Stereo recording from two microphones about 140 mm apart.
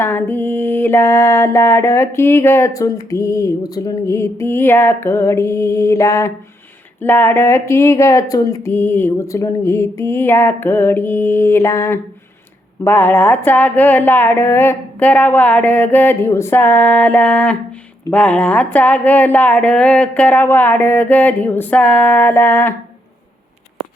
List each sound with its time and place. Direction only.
0.0 s music: 15° left (ahead or behind)
5.0 s mantra: 20° left (ahead or behind)
7.0 s music: 15° left (ahead or behind)